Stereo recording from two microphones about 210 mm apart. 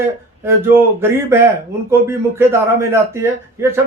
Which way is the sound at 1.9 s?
10° right (ahead or behind).